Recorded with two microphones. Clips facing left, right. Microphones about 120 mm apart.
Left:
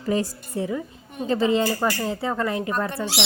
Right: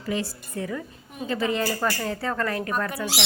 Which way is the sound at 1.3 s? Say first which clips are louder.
Left 5 dB; 25° left (ahead or behind).